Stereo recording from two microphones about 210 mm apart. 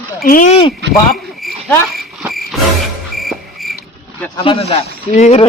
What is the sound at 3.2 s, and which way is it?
Cricket, centre (ahead or behind).